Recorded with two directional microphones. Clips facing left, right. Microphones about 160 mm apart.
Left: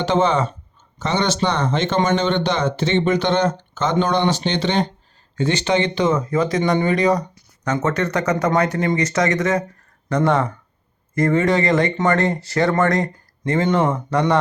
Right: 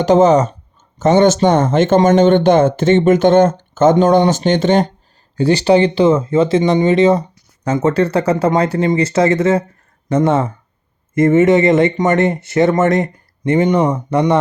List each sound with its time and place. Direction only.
0.0 s speech: 40° right (ahead or behind)
5.4 s speech: 35° right (ahead or behind)